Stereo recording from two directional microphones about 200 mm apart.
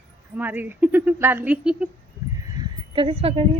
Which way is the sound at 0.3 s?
10° right (ahead or behind).